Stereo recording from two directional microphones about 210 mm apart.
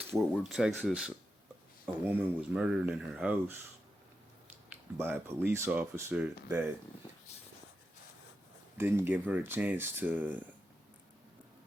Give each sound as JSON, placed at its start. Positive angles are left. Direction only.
{"t": 0.1, "sound": "speech", "side_deg": 0}
{"t": 4.7, "sound": "speech", "side_deg": -10}
{"t": 8.8, "sound": "speech", "side_deg": -10}